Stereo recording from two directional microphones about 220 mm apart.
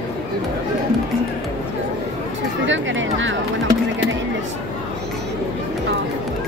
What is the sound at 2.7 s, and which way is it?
Speech, 60° right (ahead or behind).